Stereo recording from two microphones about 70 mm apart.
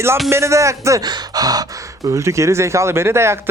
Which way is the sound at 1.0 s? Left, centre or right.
Right.